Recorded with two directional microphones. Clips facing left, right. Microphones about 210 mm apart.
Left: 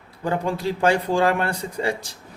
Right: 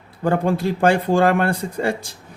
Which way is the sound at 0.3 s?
50° right (ahead or behind).